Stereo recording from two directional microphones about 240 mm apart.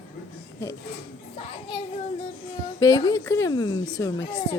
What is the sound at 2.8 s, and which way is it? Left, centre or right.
Speech, centre.